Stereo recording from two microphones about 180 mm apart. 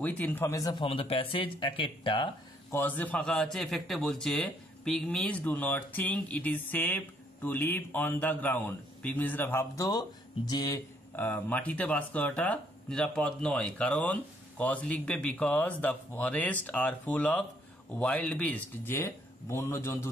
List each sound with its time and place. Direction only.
0.0 s speech: 10° left (ahead or behind); by 2.2 s 25° left (ahead or behind)
2.7 s a man's voice: 10° left (ahead or behind)